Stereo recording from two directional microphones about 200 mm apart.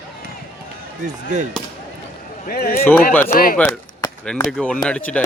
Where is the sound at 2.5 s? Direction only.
50° left (ahead or behind).